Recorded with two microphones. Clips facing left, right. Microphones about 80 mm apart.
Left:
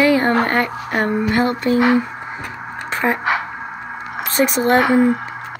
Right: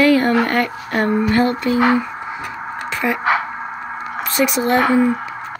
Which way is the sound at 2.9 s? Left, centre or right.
Left.